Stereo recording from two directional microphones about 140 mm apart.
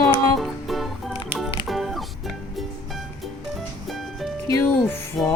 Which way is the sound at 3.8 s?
Centre (ahead or behind).